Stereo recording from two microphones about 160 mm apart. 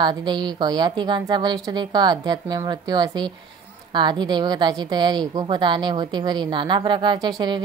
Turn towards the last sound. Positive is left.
turn(degrees=-30)  # may be behind; listen again after turning